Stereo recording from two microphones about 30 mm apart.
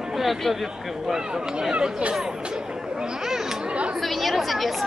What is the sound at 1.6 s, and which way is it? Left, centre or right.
Speech, right.